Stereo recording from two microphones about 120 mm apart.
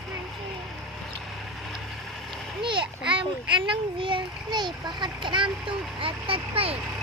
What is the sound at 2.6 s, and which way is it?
A child's voice, 40° right (ahead or behind).